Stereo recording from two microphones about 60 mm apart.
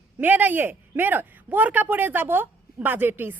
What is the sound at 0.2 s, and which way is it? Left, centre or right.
A man's voice, right.